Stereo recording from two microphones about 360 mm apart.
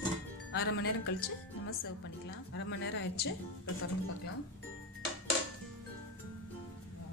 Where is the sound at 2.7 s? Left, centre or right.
Left.